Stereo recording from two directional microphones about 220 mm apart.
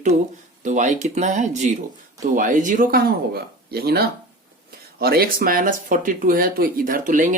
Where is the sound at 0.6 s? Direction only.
35° right (ahead or behind).